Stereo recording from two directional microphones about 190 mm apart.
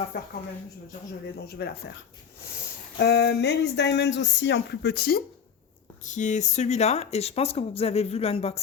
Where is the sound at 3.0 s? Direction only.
60° left (ahead or behind).